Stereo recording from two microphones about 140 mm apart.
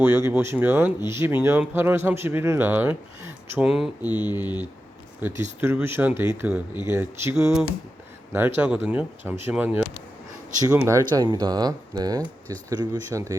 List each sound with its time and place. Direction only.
0.0 s speech: 15° right (ahead or behind)
3.2 s a sound: 15° right (ahead or behind)
3.7 s speech: 5° right (ahead or behind); by 13.3 s 20° right (ahead or behind)